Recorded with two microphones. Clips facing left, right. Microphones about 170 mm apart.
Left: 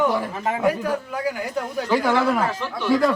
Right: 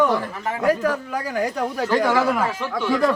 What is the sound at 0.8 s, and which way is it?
Speech, 75° right (ahead or behind).